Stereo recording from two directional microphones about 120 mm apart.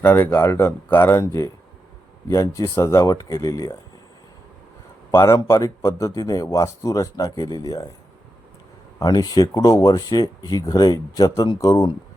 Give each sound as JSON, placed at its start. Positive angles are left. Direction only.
{"t": 0.0, "sound": "speech", "side_deg": 15}
{"t": 5.1, "sound": "speech", "side_deg": 25}
{"t": 9.0, "sound": "speech", "side_deg": 30}